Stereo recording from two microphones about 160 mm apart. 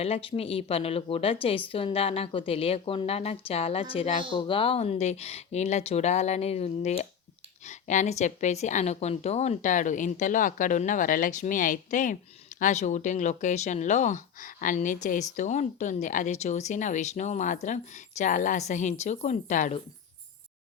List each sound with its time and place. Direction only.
0.0 s speech: 35° left (ahead or behind)